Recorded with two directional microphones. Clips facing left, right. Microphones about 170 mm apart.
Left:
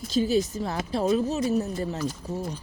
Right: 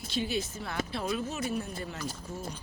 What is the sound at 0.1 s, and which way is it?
Speech, 40° left (ahead or behind).